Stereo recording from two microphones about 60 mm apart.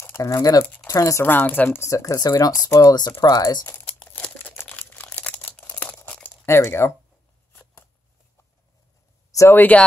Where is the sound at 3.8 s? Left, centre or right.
Left.